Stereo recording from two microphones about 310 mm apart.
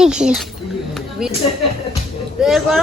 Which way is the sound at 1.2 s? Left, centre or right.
Centre.